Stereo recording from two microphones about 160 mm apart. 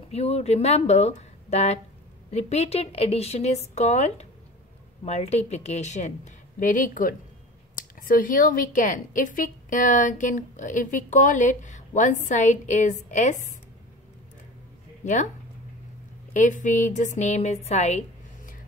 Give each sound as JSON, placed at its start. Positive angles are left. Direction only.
{"t": 0.1, "sound": "a woman's voice", "side_deg": 40}
{"t": 16.3, "sound": "a woman's voice", "side_deg": 50}
{"t": 17.6, "sound": "a sound", "side_deg": 45}